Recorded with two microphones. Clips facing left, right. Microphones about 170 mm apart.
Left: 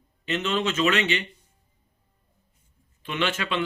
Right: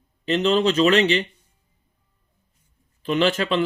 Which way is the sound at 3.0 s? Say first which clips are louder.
Right 7 dB; 35° right (ahead or behind).